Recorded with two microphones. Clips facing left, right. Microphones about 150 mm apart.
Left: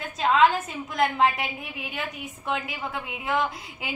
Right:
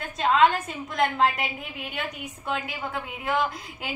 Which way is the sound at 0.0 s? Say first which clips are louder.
Even; centre (ahead or behind).